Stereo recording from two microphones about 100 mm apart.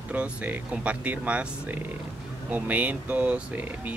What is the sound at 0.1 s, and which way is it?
Speech, 15° right (ahead or behind).